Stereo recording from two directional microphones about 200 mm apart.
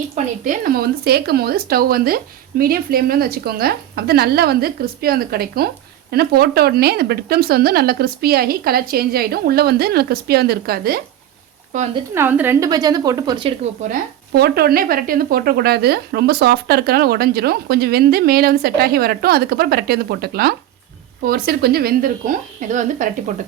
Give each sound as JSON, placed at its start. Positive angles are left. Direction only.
{"t": 0.4, "sound": "speech", "side_deg": -45}
{"t": 11.7, "sound": "speech", "side_deg": -40}
{"t": 12.1, "sound": "a woman's voice", "side_deg": -10}
{"t": 13.8, "sound": "speech", "side_deg": -35}
{"t": 14.3, "sound": "speech", "side_deg": -50}